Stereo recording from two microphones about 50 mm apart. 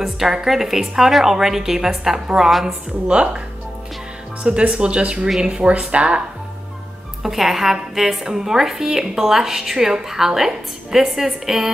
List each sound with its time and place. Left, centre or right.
0.0 s a woman's voice: centre
3.1 s speech: centre
7.2 s a woman's voice: centre